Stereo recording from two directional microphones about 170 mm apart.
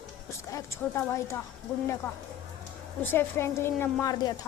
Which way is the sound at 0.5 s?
15° left (ahead or behind).